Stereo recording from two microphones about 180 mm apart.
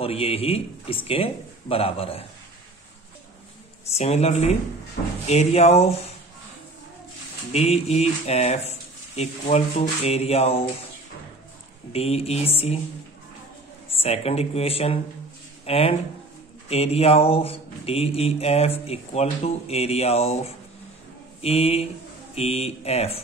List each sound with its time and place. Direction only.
0.0 s speech: 30° left (ahead or behind)
4.0 s speech: 35° left (ahead or behind)
7.5 s speech: 35° left (ahead or behind)
11.9 s speech: 35° left (ahead or behind)
13.9 s speech: 35° left (ahead or behind)